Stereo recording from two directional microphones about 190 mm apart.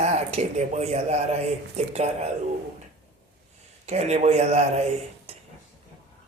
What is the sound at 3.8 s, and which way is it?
Speech, 35° right (ahead or behind).